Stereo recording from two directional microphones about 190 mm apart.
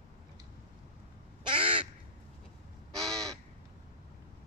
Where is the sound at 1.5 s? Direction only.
25° right (ahead or behind).